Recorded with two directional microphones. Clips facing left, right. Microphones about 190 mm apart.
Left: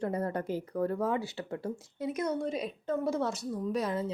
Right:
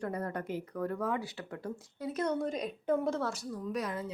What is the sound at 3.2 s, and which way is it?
Speech, 20° left (ahead or behind).